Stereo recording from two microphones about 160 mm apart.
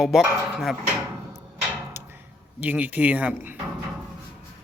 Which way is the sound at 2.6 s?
10° right (ahead or behind).